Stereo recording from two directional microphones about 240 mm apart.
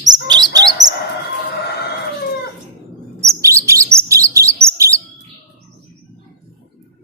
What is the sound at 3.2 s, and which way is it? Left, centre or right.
Chirp, centre.